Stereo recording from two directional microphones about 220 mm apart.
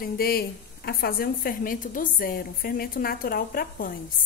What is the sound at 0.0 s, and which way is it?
A woman's voice, 45° left (ahead or behind).